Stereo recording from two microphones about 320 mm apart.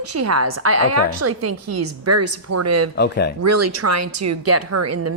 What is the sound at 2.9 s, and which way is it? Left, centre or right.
Speech, left.